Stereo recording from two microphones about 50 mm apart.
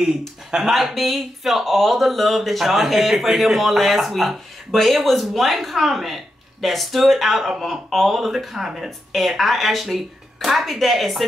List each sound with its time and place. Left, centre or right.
0.7 s speech: centre